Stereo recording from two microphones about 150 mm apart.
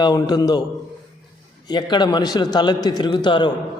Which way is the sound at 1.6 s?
30° left (ahead or behind).